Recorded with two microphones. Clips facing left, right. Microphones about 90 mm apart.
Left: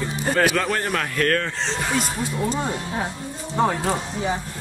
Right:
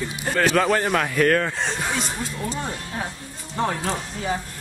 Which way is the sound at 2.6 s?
15° left (ahead or behind).